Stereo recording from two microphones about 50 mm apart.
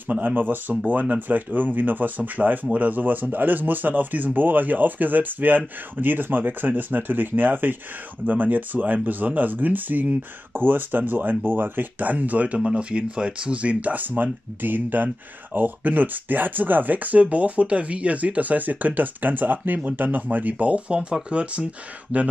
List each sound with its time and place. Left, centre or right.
0.4 s speech: right